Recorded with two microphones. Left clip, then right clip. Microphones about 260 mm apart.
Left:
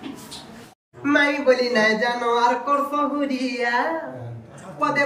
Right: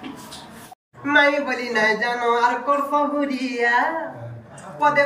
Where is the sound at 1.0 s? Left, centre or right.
Centre.